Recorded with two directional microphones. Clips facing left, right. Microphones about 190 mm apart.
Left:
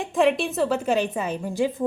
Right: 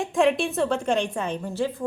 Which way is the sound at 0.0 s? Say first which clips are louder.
Even; centre (ahead or behind).